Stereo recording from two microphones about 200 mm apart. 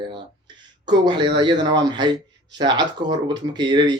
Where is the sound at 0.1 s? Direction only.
20° right (ahead or behind).